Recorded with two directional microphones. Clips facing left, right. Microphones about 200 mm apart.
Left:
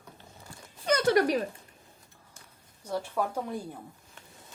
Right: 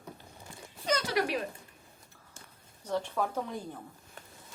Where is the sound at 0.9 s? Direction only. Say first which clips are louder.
Left 6 dB; 55° left (ahead or behind).